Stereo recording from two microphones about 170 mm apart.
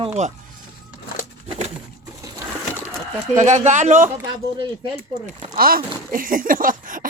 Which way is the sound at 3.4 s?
45° right (ahead or behind).